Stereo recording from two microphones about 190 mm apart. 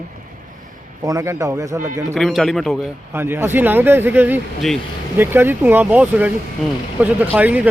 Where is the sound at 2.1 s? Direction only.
Centre (ahead or behind).